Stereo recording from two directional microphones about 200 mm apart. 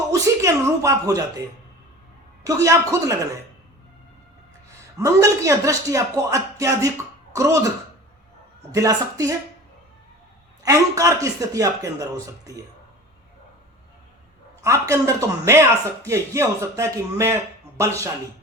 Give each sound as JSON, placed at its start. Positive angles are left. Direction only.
{"t": 0.1, "sound": "a man's voice", "side_deg": -15}
{"t": 2.4, "sound": "a man's voice", "side_deg": -15}
{"t": 4.9, "sound": "a man's voice", "side_deg": -15}
{"t": 8.7, "sound": "a man's voice", "side_deg": -15}
{"t": 10.6, "sound": "a man's voice", "side_deg": -15}
{"t": 14.6, "sound": "a man's voice", "side_deg": -15}